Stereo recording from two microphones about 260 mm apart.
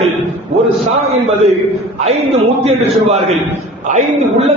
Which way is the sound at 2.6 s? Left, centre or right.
Right.